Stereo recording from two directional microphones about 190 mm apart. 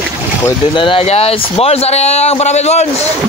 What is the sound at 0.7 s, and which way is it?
Speech, 25° left (ahead or behind).